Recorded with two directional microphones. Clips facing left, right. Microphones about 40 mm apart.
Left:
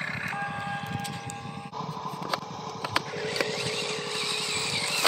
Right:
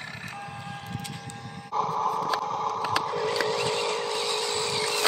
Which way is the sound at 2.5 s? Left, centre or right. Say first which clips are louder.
Right 8 dB; right.